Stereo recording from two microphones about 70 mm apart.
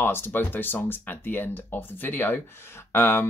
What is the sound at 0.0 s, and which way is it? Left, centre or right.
Speech, left.